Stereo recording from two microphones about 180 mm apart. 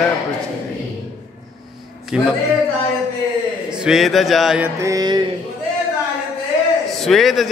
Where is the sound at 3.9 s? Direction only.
Centre (ahead or behind).